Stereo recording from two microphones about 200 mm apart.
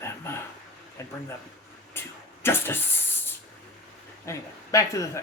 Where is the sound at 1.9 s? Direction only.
10° left (ahead or behind).